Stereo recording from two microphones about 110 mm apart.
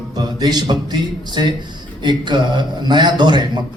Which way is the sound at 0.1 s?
40° right (ahead or behind).